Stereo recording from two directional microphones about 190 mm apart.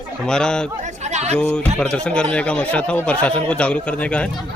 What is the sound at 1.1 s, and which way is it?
Speech, 35° right (ahead or behind).